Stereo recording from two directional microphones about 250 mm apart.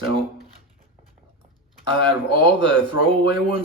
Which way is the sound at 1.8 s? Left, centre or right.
Centre.